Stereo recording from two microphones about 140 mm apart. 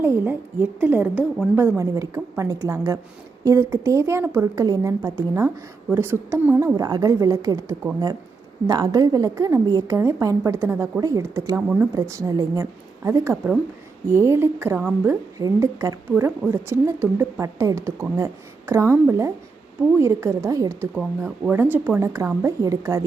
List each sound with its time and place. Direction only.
0.0 s a woman's voice: 15° right (ahead or behind)
6.7 s a woman's voice: 25° right (ahead or behind)